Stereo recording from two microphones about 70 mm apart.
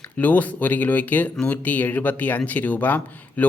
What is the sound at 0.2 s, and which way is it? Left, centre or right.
Speech, left.